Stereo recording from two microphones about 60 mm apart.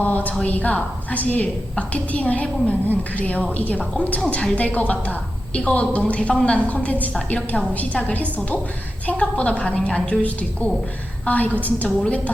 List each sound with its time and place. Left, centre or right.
0.0 s a woman's voice: left